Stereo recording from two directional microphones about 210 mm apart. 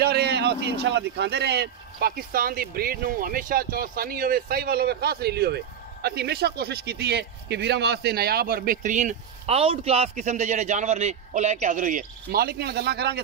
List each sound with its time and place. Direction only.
0.0 s speech: 50° right (ahead or behind)